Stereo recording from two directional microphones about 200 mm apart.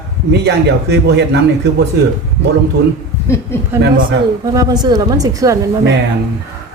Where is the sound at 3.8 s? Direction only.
45° right (ahead or behind).